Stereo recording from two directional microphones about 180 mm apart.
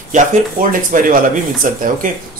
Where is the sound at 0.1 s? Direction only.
45° right (ahead or behind).